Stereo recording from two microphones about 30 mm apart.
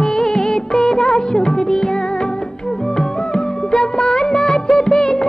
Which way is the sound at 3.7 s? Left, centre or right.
Left.